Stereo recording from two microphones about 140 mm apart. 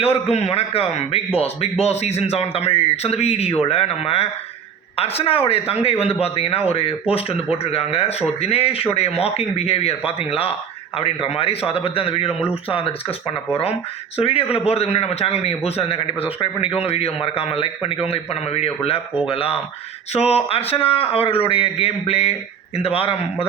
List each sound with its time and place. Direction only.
0.0 s a man's voice: 45° left (ahead or behind)
14.2 s a man's voice: 45° left (ahead or behind)